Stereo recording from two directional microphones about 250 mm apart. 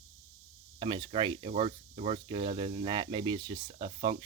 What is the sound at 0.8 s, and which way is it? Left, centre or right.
Speech, centre.